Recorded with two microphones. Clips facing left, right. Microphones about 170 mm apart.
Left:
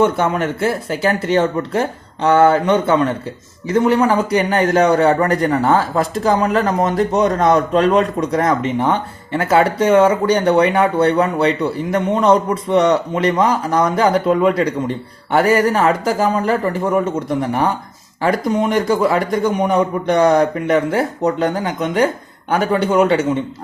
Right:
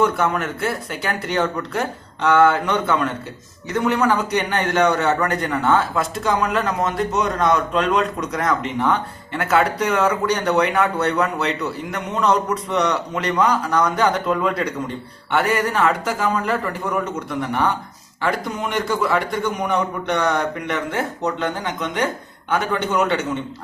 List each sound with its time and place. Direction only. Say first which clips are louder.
0.0 s a man's voice: left 4 dB; 25° left (ahead or behind)